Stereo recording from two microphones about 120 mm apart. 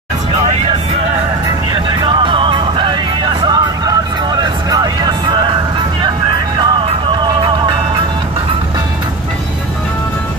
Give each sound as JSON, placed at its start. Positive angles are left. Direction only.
{"t": 1.7, "sound": "music", "side_deg": -40}